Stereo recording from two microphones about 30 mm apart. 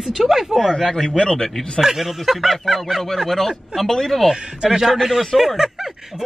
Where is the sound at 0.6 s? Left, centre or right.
Centre.